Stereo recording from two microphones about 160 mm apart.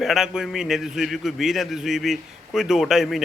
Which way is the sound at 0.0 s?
5° right (ahead or behind).